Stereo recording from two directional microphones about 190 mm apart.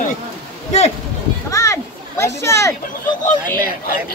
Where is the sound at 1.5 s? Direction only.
15° left (ahead or behind).